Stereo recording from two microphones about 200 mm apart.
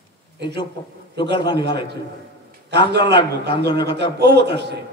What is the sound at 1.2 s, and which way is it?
A man's voice, 55° right (ahead or behind).